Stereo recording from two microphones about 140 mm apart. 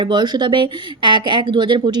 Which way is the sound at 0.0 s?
35° right (ahead or behind).